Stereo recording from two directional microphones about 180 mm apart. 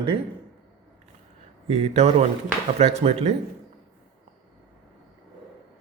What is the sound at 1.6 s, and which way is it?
A man's voice, 40° right (ahead or behind).